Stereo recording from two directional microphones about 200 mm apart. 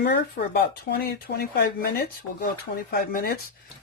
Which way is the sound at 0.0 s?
55° left (ahead or behind).